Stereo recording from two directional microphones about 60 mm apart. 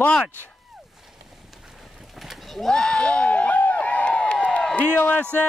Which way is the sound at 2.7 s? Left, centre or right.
Centre.